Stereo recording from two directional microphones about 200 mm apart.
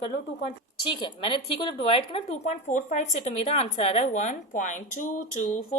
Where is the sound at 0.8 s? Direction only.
25° left (ahead or behind).